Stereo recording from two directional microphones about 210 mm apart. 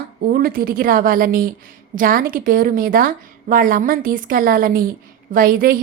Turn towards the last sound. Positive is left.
turn(degrees=-45)  # may be behind; listen again after turning